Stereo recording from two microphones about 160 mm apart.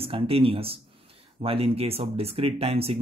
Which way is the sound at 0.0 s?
35° right (ahead or behind).